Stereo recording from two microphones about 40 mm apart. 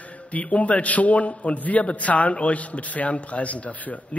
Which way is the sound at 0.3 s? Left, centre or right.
Left.